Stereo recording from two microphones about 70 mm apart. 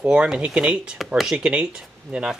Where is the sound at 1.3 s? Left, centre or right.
Centre.